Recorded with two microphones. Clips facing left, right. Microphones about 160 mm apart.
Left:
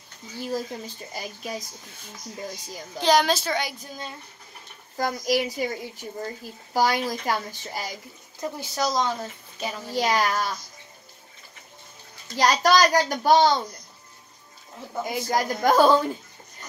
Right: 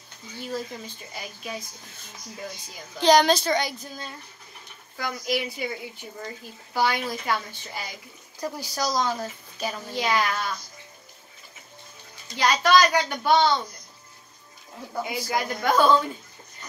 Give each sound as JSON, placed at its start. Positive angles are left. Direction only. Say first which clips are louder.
{"t": 1.1, "sound": "speech", "louder": "left 2 dB", "side_deg": 40}
{"t": 3.0, "sound": "a child's voice", "louder": "right 2 dB", "side_deg": 5}
{"t": 4.9, "sound": "speech", "louder": "left 4 dB", "side_deg": 40}
{"t": 8.4, "sound": "speech", "louder": "left 2 dB", "side_deg": 25}
{"t": 9.9, "sound": "speech", "louder": "left 3 dB", "side_deg": 40}
{"t": 12.4, "sound": "speech", "louder": "left 1 dB", "side_deg": 40}
{"t": 15.0, "sound": "speech", "louder": "left 4 dB", "side_deg": 45}